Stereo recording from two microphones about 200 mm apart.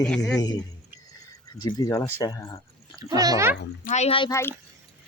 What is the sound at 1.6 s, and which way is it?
Speech, 15° left (ahead or behind).